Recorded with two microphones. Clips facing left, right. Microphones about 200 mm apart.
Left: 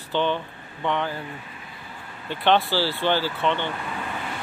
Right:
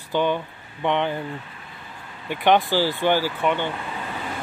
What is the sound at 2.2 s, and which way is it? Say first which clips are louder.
Speech: right 2 dB; 15° right (ahead or behind).